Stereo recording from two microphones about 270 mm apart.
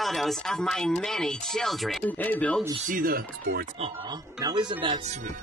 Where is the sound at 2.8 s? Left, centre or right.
Right.